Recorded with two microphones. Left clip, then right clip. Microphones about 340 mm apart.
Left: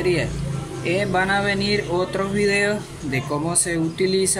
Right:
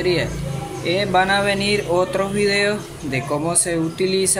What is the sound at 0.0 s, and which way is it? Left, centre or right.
Speech, centre.